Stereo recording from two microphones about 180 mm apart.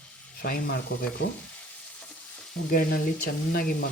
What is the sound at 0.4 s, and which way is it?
Speech, 55° left (ahead or behind).